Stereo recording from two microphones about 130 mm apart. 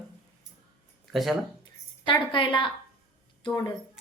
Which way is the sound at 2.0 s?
40° left (ahead or behind).